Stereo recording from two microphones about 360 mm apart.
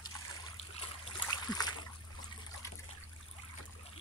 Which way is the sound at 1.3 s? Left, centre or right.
Centre.